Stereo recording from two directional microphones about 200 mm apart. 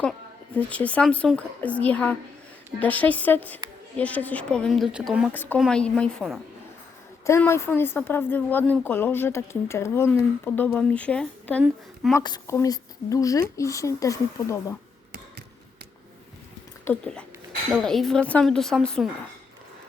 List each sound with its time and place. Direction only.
0.5 s a woman's voice: 5° left (ahead or behind)
5.3 s a woman's voice: 10° left (ahead or behind)
7.3 s a woman's voice: 15° left (ahead or behind)
12.1 s a woman's voice: 15° left (ahead or behind)
16.8 s speech: 5° left (ahead or behind)